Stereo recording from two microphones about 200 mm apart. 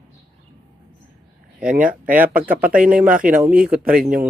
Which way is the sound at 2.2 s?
10° right (ahead or behind).